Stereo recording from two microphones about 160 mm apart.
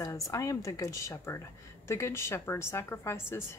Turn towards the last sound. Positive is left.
turn(degrees=15)  # may be behind; listen again after turning